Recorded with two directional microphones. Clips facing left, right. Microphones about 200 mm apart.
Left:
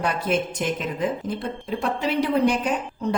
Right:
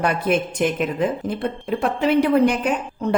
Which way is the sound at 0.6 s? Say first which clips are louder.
Right 5 dB; 65° right (ahead or behind).